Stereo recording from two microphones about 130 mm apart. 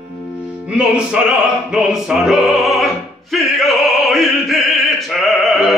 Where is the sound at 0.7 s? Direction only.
5° right (ahead or behind).